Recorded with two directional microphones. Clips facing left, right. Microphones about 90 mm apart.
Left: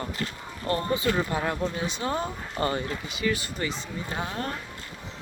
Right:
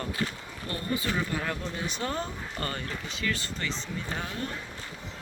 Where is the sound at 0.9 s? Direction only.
20° left (ahead or behind).